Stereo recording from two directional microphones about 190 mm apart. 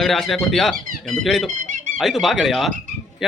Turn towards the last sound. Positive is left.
turn(degrees=0)  # may be behind; listen again after turning